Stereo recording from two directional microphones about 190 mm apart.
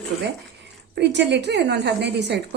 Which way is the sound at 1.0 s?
65° right (ahead or behind).